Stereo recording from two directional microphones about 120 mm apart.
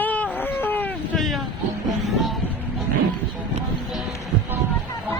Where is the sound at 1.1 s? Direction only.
Centre (ahead or behind).